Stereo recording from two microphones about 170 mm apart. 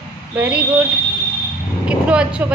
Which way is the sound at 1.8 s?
5° right (ahead or behind).